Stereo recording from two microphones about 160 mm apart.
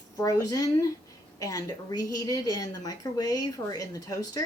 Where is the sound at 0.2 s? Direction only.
20° left (ahead or behind).